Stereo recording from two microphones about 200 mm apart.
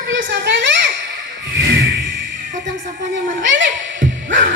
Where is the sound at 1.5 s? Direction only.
80° right.